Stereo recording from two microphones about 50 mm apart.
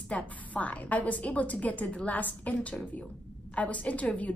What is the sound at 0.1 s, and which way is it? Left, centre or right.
A woman's voice, left.